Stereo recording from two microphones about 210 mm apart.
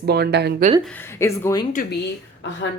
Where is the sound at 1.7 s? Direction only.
40° left (ahead or behind).